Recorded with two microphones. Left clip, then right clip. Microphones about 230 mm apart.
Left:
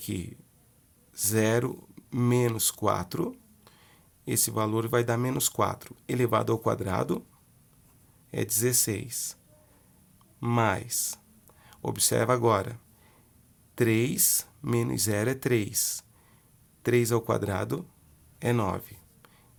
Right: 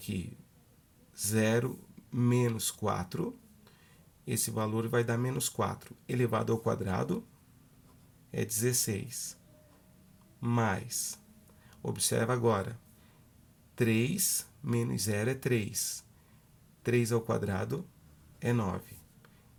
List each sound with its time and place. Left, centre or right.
0.0 s speech: left
8.3 s speech: left
10.4 s speech: left
13.7 s speech: left